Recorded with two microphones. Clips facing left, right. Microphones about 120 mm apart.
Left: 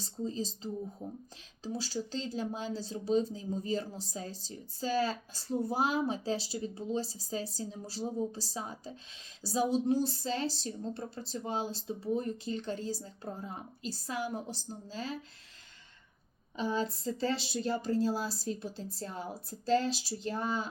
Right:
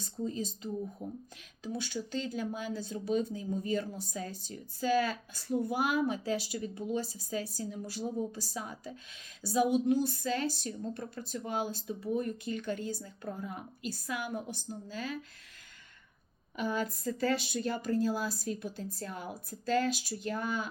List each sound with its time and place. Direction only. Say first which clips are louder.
0.0 s speech: even; 30° left (ahead or behind)
1.0 s speech: right 1 dB; 15° right (ahead or behind)
1.6 s speech: left 1 dB; 30° left (ahead or behind)
16.6 s speech: left 1 dB; 25° left (ahead or behind)